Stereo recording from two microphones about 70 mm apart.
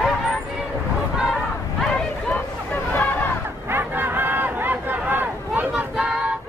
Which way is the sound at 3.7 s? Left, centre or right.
Right.